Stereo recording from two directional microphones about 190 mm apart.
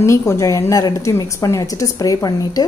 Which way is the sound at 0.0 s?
15° left (ahead or behind).